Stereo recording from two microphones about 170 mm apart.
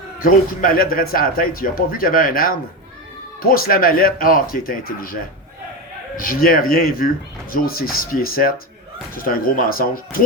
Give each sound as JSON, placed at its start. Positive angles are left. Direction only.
{"t": 0.2, "sound": "speech", "side_deg": 55}
{"t": 6.1, "sound": "speech", "side_deg": 55}